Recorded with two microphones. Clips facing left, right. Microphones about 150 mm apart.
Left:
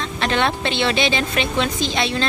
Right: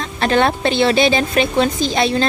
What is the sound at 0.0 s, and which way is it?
A woman's voice, 40° right (ahead or behind).